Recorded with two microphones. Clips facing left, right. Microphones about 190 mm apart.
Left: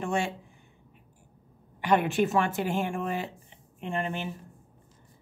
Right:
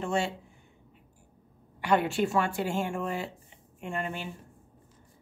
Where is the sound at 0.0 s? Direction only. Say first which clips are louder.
Even; 15° left (ahead or behind).